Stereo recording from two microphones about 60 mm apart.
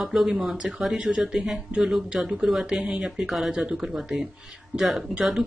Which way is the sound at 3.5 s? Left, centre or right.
Centre.